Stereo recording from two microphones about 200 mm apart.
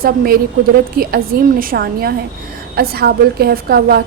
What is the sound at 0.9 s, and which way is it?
A woman's voice, 45° right (ahead or behind).